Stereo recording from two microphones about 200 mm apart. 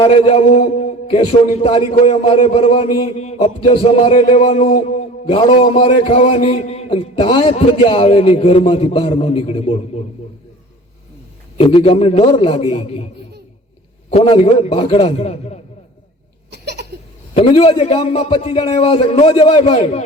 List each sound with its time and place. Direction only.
0.0 s a man's voice: 30° left (ahead or behind)
11.5 s a man's voice: 30° left (ahead or behind)
14.1 s a man's voice: 30° left (ahead or behind)
16.5 s laughter: 55° right (ahead or behind)
17.3 s a man's voice: 30° left (ahead or behind)